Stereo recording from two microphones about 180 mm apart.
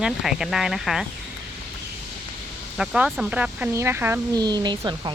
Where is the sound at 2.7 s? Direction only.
5° right (ahead or behind).